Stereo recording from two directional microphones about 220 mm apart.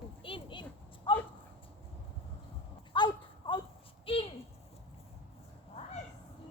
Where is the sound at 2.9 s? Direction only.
20° left (ahead or behind).